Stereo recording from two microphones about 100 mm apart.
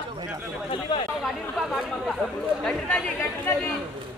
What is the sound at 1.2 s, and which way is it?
Speech, centre (ahead or behind).